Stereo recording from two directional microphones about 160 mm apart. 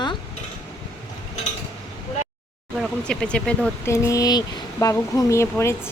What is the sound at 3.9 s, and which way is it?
Speech, 20° left (ahead or behind).